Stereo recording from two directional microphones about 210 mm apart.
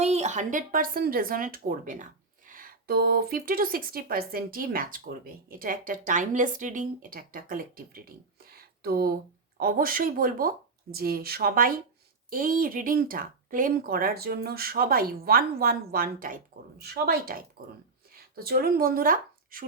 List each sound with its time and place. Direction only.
0.0 s speech: 30° right (ahead or behind)